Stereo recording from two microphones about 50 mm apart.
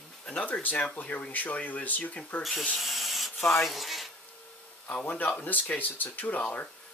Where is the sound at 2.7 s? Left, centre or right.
Centre.